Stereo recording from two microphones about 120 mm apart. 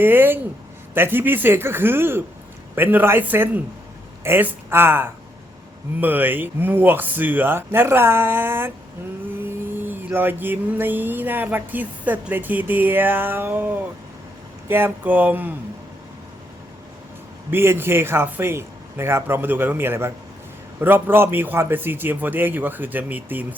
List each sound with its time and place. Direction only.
0.0 s speech: 15° right (ahead or behind)
9.7 s speech: 15° right (ahead or behind)
17.5 s speech: 20° right (ahead or behind)